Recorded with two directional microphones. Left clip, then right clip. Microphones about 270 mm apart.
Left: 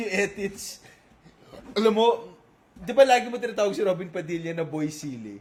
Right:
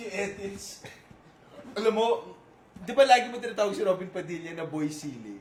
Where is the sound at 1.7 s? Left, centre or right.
Centre.